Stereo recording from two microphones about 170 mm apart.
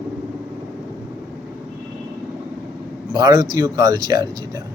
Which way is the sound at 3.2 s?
20° right (ahead or behind).